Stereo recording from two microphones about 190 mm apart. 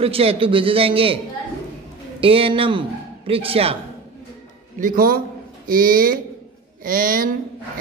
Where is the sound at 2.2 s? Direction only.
30° right (ahead or behind).